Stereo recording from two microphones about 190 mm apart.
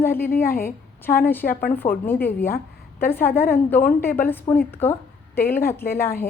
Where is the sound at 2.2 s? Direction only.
10° left (ahead or behind).